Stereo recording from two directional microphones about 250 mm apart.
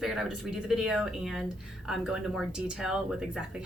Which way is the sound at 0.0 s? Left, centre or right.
Centre.